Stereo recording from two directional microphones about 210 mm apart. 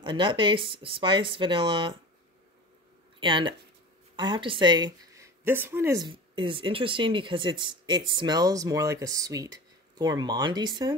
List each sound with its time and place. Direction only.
0.0 s a woman's voice: 20° right (ahead or behind)
3.2 s a woman's voice: 25° right (ahead or behind)